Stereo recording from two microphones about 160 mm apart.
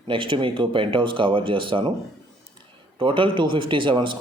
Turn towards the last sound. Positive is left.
turn(degrees=-30)  # may be behind; listen again after turning